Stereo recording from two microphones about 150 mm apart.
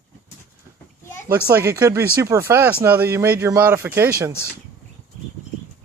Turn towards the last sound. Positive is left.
turn(degrees=-15)  # may be behind; listen again after turning